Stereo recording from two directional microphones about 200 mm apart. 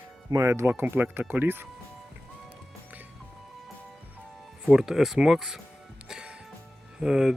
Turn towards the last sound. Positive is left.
turn(degrees=-5)  # may be behind; listen again after turning